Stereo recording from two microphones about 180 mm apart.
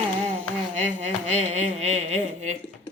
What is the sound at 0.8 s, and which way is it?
Speech, 40° right (ahead or behind).